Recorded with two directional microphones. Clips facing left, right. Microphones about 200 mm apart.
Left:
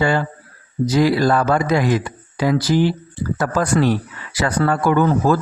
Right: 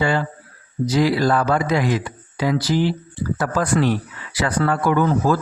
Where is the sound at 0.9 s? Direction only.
50° left (ahead or behind).